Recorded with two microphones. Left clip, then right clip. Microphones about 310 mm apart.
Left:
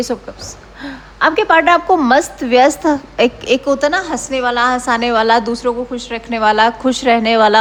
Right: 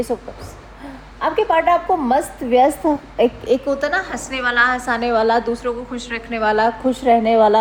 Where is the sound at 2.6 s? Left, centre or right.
Right.